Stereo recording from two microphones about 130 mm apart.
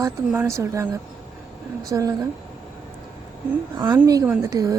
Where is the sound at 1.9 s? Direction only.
25° right (ahead or behind).